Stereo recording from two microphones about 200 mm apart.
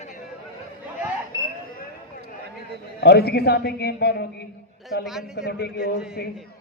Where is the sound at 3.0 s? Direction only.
55° left (ahead or behind).